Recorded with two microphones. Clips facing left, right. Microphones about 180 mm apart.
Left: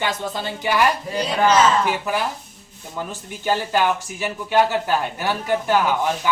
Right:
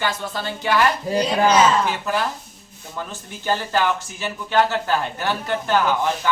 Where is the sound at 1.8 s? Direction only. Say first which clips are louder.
Left 1 dB; 10° left (ahead or behind).